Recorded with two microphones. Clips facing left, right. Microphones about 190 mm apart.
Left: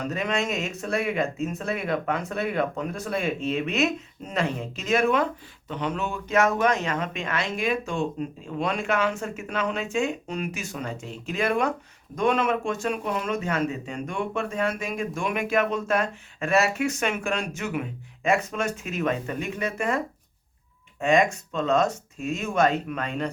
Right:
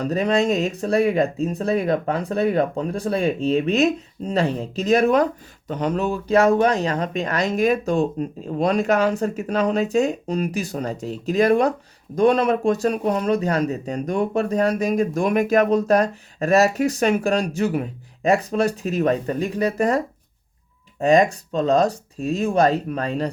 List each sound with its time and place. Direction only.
0.0 s speech: 35° right (ahead or behind)
21.0 s speech: 35° right (ahead or behind)